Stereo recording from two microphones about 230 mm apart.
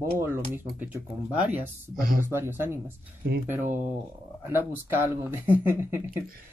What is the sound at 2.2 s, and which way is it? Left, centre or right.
Speech, centre.